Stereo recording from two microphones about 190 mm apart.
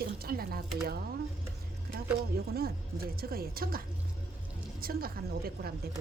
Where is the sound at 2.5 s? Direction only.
55° right (ahead or behind).